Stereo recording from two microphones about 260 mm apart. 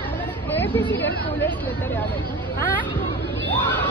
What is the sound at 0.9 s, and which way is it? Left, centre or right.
Speech, left.